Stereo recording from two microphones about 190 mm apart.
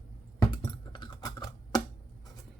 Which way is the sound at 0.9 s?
20° left (ahead or behind).